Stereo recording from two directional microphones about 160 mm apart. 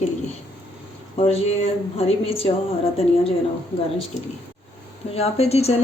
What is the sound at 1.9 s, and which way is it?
Speech, 35° left (ahead or behind).